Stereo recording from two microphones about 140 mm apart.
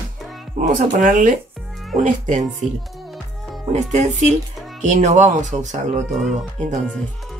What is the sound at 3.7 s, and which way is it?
Speech, 55° right (ahead or behind).